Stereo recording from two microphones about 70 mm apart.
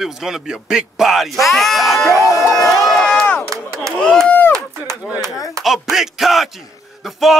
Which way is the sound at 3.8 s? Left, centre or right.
Centre.